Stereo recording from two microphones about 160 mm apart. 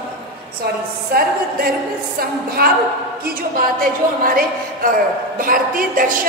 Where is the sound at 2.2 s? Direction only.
70° right (ahead or behind).